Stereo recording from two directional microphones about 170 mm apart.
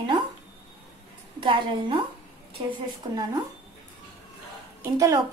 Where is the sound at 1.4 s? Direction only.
30° right (ahead or behind).